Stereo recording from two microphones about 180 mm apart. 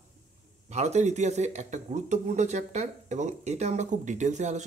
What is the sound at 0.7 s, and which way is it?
Speech, 40° right (ahead or behind).